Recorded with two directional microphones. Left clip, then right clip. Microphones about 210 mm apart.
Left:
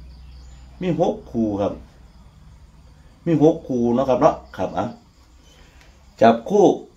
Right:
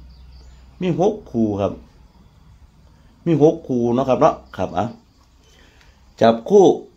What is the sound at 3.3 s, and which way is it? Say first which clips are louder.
Speech: right 2 dB; 55° right (ahead or behind).